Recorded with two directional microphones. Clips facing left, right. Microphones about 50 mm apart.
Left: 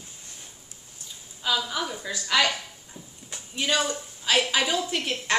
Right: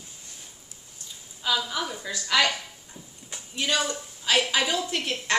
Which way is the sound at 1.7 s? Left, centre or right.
Centre.